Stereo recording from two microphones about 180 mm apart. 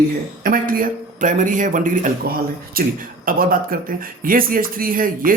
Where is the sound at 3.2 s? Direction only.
50° right (ahead or behind).